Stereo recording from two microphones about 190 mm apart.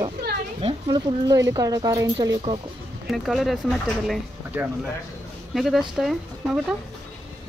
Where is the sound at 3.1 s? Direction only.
Centre (ahead or behind).